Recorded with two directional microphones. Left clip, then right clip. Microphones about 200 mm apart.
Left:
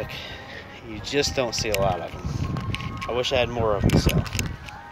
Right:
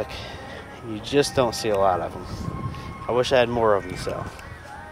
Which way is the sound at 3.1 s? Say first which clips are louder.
Right 4 dB; 25° right (ahead or behind).